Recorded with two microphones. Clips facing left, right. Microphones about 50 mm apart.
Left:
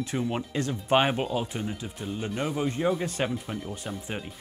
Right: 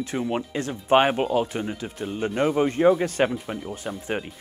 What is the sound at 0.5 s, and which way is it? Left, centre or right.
Speech, right.